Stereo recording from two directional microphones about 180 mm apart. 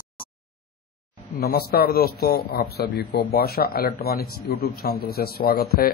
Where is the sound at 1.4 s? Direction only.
60° left (ahead or behind).